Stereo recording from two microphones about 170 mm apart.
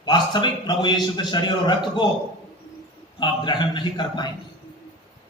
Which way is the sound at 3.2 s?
25° left (ahead or behind).